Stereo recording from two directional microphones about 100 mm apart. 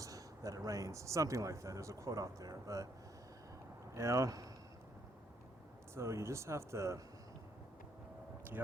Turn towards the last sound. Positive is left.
turn(degrees=-30)  # may be behind; listen again after turning